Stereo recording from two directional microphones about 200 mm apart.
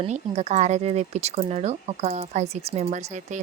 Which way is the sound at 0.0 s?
35° right (ahead or behind).